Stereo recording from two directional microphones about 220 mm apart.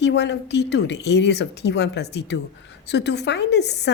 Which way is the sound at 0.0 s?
50° left (ahead or behind).